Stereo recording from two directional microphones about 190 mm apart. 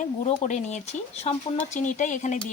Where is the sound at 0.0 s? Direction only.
35° left (ahead or behind).